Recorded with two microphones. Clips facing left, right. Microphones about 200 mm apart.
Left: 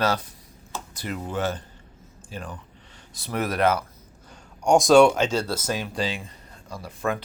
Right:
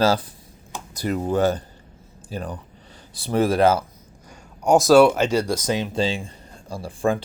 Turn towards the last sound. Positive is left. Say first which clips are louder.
# right 5 dB
turn(degrees=-30)  # may be behind; listen again after turning